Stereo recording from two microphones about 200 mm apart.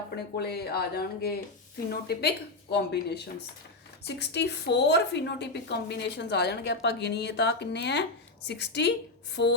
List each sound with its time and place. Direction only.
0.3 s a woman's voice: 55° left (ahead or behind)